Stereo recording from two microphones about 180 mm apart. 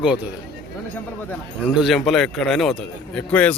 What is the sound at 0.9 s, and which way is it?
Speech, 10° left (ahead or behind).